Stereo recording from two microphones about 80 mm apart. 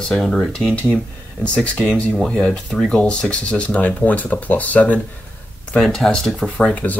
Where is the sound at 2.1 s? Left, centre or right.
Centre.